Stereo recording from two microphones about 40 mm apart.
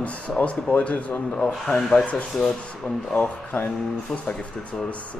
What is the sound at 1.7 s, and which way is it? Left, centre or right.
Speech, centre.